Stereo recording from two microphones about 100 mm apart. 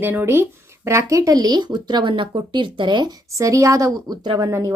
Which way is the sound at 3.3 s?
30° right (ahead or behind).